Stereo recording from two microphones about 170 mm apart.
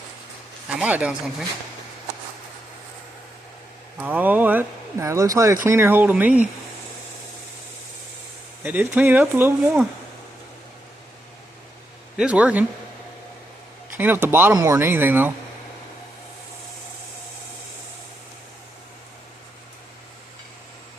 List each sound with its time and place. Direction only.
0.8 s speech: 5° right (ahead or behind)
4.0 s speech: 10° right (ahead or behind)
8.6 s speech: 10° right (ahead or behind)
12.1 s speech: 5° right (ahead or behind)
13.9 s speech: 10° right (ahead or behind)